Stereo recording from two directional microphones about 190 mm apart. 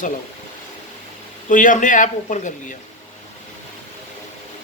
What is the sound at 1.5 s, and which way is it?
Speech, 45° left (ahead or behind).